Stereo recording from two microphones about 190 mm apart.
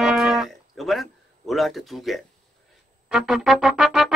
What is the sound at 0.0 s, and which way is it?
Music, centre (ahead or behind).